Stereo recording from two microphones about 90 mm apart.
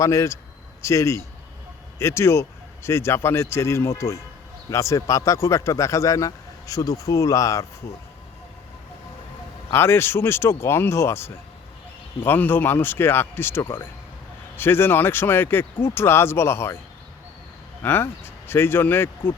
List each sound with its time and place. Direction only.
0.0 s speech: 35° left (ahead or behind)
9.7 s speech: 25° left (ahead or behind)
17.8 s speech: 25° left (ahead or behind)